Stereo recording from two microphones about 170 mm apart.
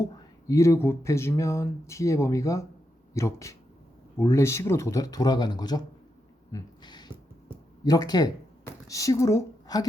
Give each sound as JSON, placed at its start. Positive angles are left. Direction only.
{"t": 0.0, "sound": "speech", "side_deg": 20}
{"t": 6.5, "sound": "a sound", "side_deg": 25}
{"t": 7.9, "sound": "speech", "side_deg": 25}